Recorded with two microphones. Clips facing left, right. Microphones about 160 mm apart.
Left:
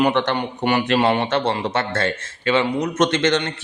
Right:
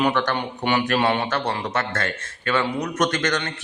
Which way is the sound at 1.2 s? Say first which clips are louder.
Left 4 dB; 25° left (ahead or behind).